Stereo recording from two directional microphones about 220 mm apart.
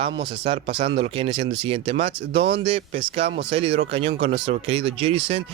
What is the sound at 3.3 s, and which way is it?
Speech, 50° right (ahead or behind).